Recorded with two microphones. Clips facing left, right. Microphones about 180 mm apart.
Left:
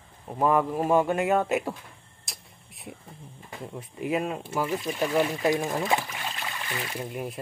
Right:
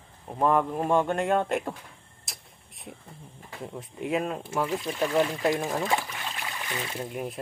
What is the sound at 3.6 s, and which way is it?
Speech, centre (ahead or behind).